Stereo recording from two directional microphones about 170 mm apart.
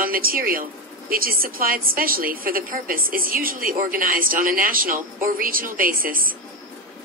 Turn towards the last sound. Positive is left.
turn(degrees=-55)  # may be behind; listen again after turning